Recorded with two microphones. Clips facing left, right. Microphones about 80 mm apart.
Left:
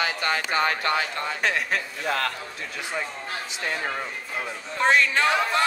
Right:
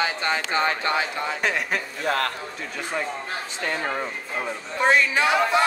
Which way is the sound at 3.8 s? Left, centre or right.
Centre.